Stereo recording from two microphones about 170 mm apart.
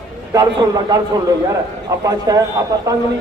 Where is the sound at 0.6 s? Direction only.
25° right (ahead or behind).